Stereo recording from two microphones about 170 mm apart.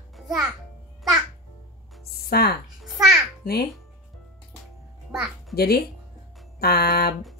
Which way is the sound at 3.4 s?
60° left (ahead or behind).